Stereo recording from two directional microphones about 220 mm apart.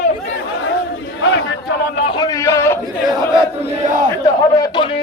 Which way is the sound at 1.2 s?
55° left (ahead or behind).